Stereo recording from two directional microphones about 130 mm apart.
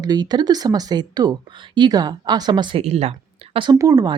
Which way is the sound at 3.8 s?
30° right (ahead or behind).